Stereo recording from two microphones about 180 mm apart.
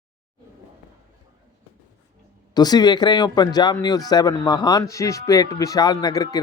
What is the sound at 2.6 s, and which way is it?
Speech, 20° left (ahead or behind).